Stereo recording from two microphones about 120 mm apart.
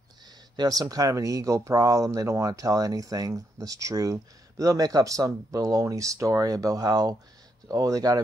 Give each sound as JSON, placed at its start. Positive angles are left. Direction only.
{"t": 0.6, "sound": "speech", "side_deg": -30}